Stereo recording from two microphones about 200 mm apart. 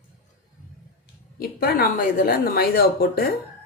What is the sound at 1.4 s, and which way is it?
A woman's voice, 50° left (ahead or behind).